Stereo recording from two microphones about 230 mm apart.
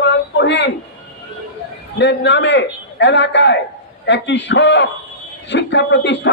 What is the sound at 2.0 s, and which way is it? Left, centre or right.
A man's voice, left.